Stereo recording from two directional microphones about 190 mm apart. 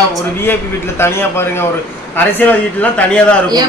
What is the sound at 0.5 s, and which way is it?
A man's voice, 10° left (ahead or behind).